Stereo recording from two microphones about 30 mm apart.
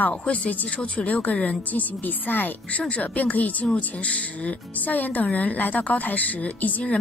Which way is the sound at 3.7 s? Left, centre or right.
Left.